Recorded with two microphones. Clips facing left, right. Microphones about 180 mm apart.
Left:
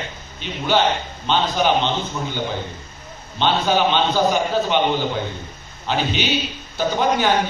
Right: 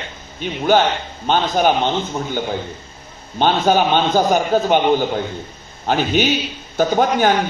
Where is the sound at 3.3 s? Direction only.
45° right (ahead or behind).